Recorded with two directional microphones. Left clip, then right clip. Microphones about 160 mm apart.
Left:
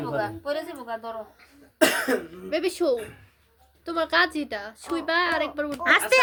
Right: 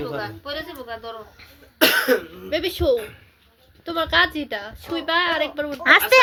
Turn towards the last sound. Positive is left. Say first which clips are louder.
# right 6 dB
turn(degrees=-40)  # may be behind; listen again after turning